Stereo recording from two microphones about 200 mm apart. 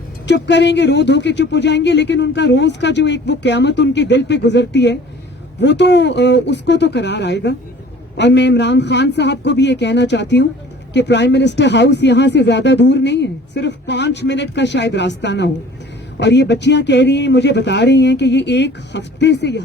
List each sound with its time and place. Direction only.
0.3 s speech: 60° left (ahead or behind)